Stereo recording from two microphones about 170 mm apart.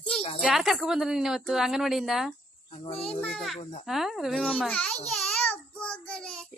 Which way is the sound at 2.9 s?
35° left (ahead or behind).